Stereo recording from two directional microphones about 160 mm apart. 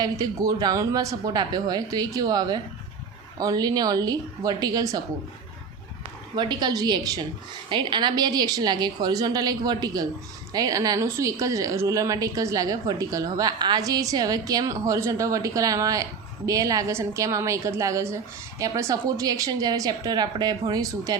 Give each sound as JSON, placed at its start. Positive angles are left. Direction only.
{"t": 0.0, "sound": "a woman's voice", "side_deg": -20}
{"t": 6.3, "sound": "a woman's voice", "side_deg": -30}